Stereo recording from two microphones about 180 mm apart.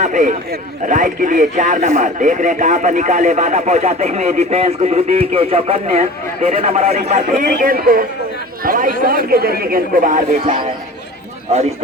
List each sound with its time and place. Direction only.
0.0 s speech: 45° right (ahead or behind)
7.4 s speech: 50° right (ahead or behind)
10.4 s a man's voice: 25° right (ahead or behind)